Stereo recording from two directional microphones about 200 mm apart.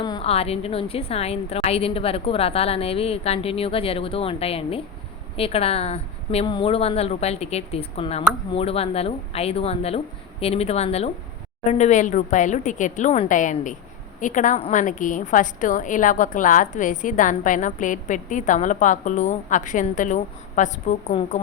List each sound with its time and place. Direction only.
0.0 s a woman's voice: 25° left (ahead or behind)